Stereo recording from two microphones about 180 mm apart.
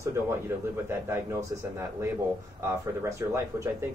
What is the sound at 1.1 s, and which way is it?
Speech, 15° right (ahead or behind).